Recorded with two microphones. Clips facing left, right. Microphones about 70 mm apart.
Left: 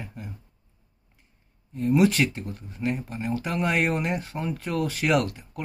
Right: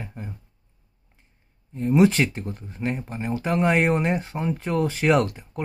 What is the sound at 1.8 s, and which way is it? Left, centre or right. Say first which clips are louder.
Speech: right 2 dB; right.